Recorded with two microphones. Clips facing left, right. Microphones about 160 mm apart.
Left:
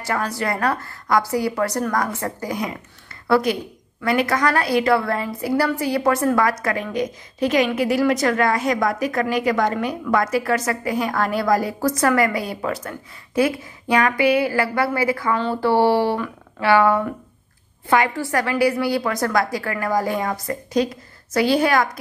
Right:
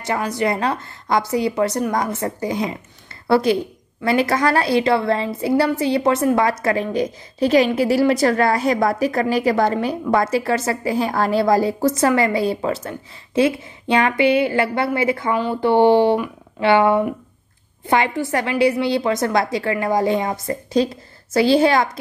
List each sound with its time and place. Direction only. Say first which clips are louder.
0.0 s a woman's voice: right 3 dB; 20° right (ahead or behind)